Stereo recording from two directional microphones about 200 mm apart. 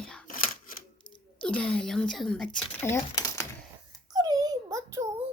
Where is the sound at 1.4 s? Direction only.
5° left (ahead or behind).